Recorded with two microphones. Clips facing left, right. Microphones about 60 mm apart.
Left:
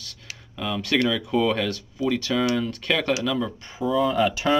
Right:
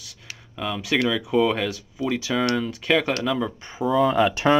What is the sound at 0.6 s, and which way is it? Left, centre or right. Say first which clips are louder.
Speech: even; centre.